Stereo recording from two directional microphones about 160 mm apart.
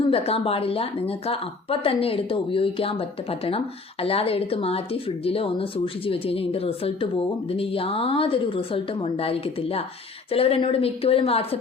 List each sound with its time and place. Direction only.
0.0 s a woman's voice: 35° left (ahead or behind)